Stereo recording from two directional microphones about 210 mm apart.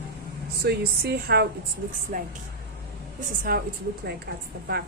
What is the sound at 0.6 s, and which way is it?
Speech, 50° right (ahead or behind).